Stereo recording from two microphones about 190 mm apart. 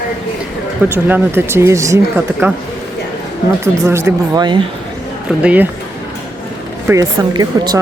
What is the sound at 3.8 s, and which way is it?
Speech, 15° right (ahead or behind).